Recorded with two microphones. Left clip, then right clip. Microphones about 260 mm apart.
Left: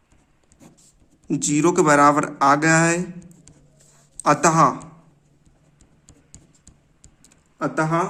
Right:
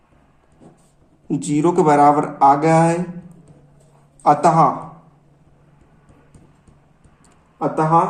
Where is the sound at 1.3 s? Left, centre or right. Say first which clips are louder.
Right 1 dB; left.